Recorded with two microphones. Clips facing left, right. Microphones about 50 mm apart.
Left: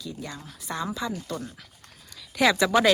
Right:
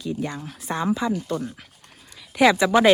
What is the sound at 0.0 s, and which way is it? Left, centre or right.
Speech, right.